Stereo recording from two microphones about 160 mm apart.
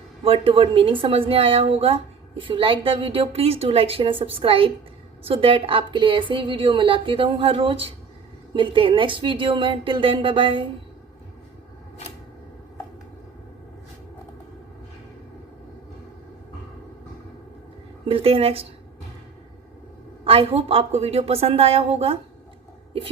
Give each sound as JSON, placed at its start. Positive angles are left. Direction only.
{"t": 0.3, "sound": "a woman's voice", "side_deg": -35}
{"t": 18.1, "sound": "a woman's voice", "side_deg": -35}
{"t": 20.2, "sound": "a woman's voice", "side_deg": -35}